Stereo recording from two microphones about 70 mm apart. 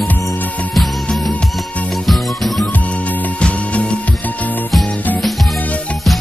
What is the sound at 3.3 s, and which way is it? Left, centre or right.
Music, centre.